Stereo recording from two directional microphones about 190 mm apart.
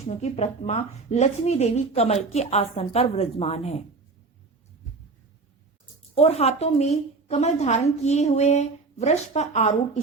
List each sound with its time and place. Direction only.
0.0 s a woman's voice: 35° left (ahead or behind)
6.1 s a woman's voice: 35° left (ahead or behind)